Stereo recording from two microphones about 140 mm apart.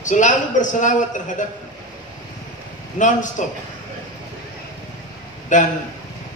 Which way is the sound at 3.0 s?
65° left (ahead or behind).